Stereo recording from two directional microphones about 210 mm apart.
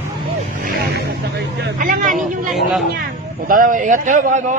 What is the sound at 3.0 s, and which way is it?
Speech, 40° right (ahead or behind).